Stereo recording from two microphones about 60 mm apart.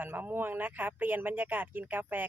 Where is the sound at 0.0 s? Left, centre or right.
Right.